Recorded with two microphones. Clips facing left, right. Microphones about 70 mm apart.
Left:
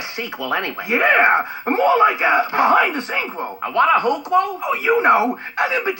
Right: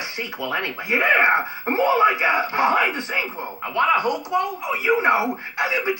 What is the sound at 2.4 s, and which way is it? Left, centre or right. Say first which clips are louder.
Speech: left 3 dB; left.